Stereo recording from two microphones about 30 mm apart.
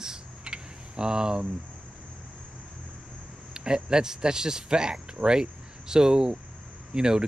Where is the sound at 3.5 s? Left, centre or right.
Right.